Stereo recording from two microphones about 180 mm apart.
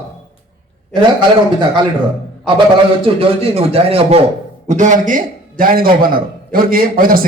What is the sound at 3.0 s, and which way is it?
Speech, 30° right (ahead or behind).